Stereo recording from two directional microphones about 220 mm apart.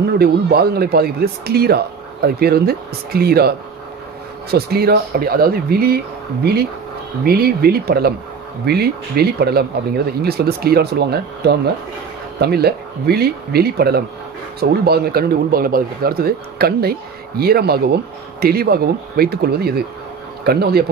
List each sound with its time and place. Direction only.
0.2 s speech: 45° right (ahead or behind)
7.2 s speech: 45° right (ahead or behind)